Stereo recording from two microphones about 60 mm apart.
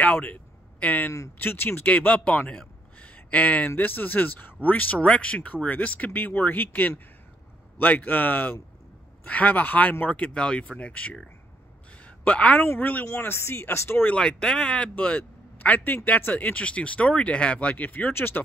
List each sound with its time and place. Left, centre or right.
0.0 s a sound: left
1.4 s speech: left
1.9 s speech: left
12.0 s a sound: left
13.0 s speech: left
14.1 s speech: centre
18.1 s speech: left